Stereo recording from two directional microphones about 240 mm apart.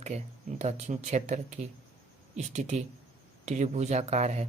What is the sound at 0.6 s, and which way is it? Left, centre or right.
A man's voice, right.